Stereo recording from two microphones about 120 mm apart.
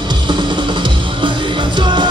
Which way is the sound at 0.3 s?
40° right (ahead or behind).